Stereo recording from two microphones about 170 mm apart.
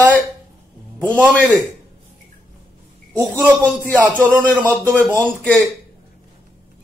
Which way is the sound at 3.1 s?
10° right (ahead or behind).